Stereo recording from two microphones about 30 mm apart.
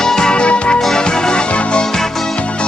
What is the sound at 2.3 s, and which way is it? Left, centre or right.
Music, left.